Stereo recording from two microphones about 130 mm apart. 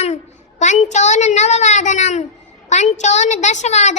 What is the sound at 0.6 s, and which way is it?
A child's voice, 65° left (ahead or behind).